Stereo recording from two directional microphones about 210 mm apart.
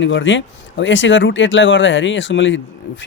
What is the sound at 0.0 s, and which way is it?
Speech, 60° left (ahead or behind).